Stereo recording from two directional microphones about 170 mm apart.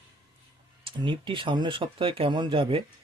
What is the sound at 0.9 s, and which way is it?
Speech, 30° right (ahead or behind).